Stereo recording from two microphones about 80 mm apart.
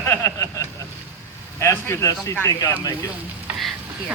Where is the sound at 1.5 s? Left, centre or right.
Left.